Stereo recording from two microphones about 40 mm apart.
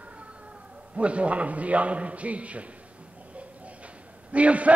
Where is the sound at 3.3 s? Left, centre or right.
Right.